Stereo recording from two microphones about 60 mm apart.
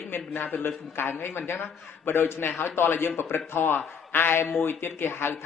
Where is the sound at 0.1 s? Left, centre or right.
Left.